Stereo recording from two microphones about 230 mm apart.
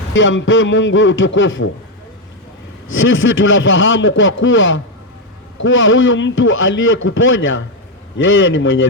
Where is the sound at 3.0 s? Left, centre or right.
Left.